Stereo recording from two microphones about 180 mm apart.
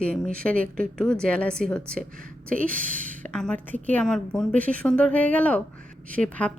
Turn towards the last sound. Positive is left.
turn(degrees=5)  # may be behind; listen again after turning